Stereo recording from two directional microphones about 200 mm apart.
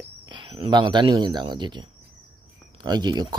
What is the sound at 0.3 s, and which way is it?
Speech, 25° right (ahead or behind).